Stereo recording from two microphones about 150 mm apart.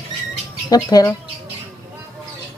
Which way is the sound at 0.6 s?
25° left (ahead or behind).